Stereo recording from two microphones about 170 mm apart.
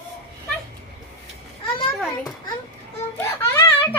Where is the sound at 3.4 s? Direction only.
15° left (ahead or behind).